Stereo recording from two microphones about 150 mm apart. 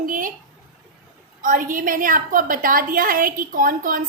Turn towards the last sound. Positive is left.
turn(degrees=-65)  # may be behind; listen again after turning